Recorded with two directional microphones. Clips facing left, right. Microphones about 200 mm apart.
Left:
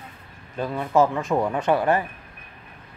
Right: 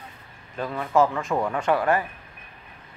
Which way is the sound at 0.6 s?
10° left (ahead or behind).